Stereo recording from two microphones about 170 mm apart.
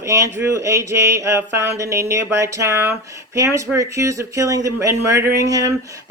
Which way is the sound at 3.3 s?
20° right (ahead or behind).